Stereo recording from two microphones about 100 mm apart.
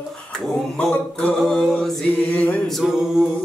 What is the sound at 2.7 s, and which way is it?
Singing, 5° right (ahead or behind).